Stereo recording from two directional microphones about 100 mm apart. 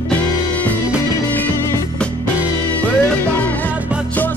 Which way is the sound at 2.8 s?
15° left (ahead or behind).